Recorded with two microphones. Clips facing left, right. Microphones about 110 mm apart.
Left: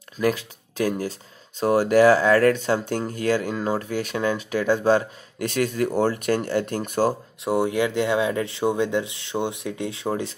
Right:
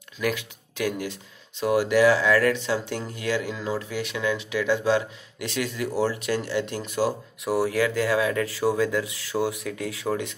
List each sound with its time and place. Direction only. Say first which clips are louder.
0.2 s speech: left 4 dB; 35° left (ahead or behind)
7.4 s speech: left 1 dB; 25° left (ahead or behind)